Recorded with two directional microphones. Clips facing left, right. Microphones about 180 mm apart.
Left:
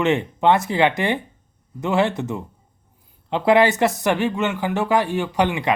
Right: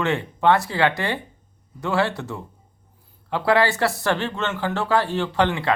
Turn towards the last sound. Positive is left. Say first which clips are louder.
# left 1 dB
turn(degrees=15)  # may be behind; listen again after turning